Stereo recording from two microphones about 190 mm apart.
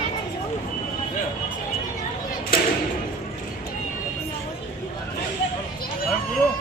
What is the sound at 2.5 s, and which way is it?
Thump, 50° left (ahead or behind).